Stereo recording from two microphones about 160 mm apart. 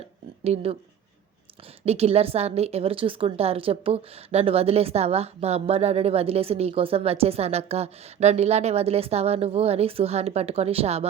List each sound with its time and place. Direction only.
0.4 s a woman's voice: 40° right (ahead or behind)
1.8 s a woman's voice: 40° right (ahead or behind)